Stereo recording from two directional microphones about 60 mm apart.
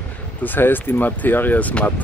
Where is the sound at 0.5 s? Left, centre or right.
Left.